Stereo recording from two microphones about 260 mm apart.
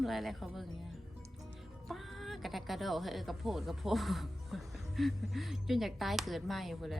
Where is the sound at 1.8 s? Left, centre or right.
Centre.